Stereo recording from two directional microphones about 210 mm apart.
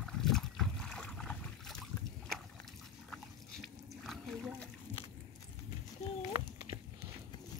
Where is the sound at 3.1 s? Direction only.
Centre (ahead or behind).